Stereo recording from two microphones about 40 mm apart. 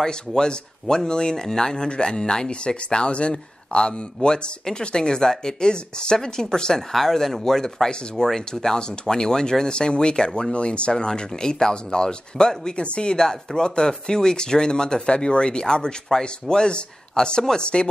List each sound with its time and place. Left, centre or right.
0.0 s speech: centre
6.9 s speech: centre